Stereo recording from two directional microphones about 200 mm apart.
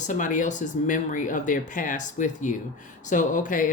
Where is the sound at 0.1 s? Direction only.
40° left (ahead or behind).